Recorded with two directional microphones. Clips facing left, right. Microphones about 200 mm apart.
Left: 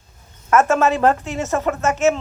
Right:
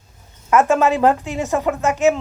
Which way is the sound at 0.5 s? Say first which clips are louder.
Right 1 dB; 15° right (ahead or behind).